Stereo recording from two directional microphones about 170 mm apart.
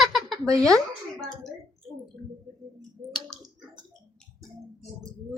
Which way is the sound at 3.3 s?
25° right (ahead or behind).